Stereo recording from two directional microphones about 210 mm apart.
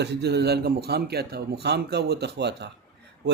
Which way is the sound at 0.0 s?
50° right (ahead or behind).